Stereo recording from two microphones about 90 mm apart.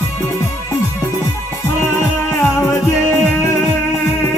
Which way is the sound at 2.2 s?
25° left (ahead or behind).